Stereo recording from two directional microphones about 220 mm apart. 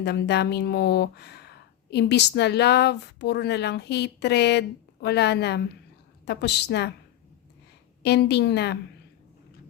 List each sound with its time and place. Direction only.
0.0 s speech: 50° left (ahead or behind)
8.0 s speech: 50° left (ahead or behind)